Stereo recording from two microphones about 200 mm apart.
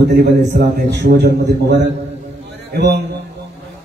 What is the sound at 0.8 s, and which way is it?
A man's voice, 55° right (ahead or behind).